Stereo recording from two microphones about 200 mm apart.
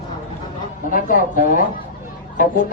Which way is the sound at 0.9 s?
45° left (ahead or behind).